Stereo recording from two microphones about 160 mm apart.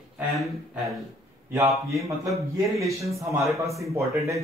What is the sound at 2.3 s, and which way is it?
A man's voice, 20° right (ahead or behind).